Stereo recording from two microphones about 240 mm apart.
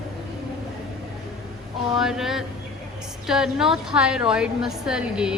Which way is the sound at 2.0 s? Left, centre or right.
Centre.